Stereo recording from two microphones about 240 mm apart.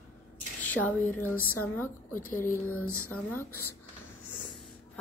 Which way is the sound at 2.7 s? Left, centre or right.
Left.